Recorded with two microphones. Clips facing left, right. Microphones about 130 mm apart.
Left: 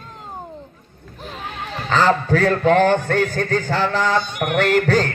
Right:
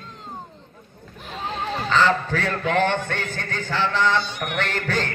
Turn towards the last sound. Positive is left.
turn(degrees=40)  # may be behind; listen again after turning